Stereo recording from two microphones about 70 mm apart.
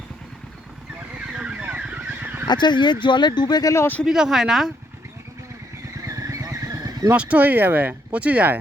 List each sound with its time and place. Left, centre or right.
1.3 s car: centre
2.5 s speech: left
4.0 s speech: centre
6.1 s vehicle: right
7.1 s speech: right